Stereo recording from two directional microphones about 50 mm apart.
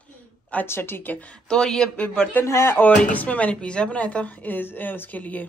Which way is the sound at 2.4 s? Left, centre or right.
Left.